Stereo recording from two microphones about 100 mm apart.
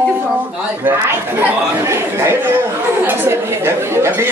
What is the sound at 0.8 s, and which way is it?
A woman's voice, 20° right (ahead or behind).